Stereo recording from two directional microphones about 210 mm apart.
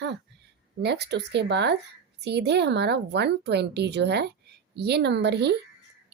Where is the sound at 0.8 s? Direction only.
50° right (ahead or behind).